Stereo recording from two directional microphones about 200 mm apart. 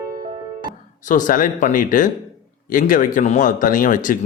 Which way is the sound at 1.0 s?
40° left (ahead or behind).